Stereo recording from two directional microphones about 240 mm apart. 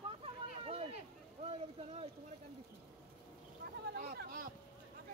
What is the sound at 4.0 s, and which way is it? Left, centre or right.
Speech, right.